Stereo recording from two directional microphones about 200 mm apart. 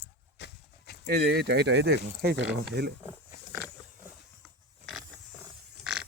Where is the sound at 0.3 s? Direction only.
55° left (ahead or behind).